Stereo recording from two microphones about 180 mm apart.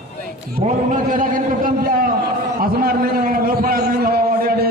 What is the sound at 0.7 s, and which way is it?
A man's voice, 45° right (ahead or behind).